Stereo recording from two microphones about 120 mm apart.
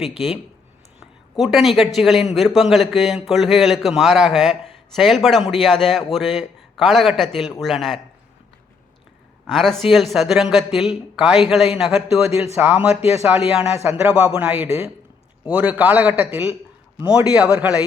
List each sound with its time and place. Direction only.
0.9 s a man's voice: 5° right (ahead or behind)
9.5 s a man's voice: centre (ahead or behind)
13.4 s a man's voice: 55° left (ahead or behind)
14.1 s a man's voice: 10° right (ahead or behind)